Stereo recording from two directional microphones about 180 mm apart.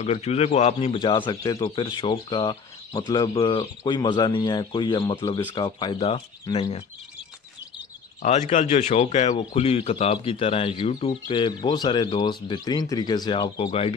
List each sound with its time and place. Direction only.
0.0 s a man's voice: 35° left (ahead or behind)
8.2 s a man's voice: 40° left (ahead or behind)